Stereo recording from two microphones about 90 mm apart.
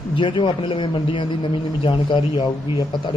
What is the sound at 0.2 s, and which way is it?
A man's voice, 65° left (ahead or behind).